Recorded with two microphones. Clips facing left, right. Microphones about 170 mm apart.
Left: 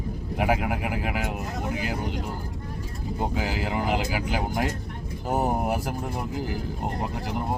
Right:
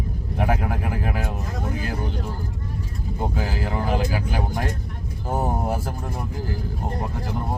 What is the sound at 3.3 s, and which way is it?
Speech, 20° left (ahead or behind).